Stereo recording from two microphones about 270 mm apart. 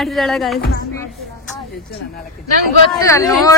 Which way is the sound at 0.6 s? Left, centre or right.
Left.